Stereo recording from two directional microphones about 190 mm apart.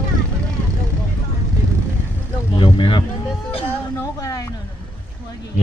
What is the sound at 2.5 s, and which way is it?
Vehicle, 25° left (ahead or behind).